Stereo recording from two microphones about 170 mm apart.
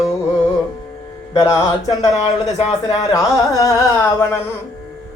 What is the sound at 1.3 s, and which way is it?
Carnatic music, 20° left (ahead or behind).